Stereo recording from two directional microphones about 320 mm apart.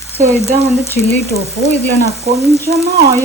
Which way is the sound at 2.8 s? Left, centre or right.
Centre.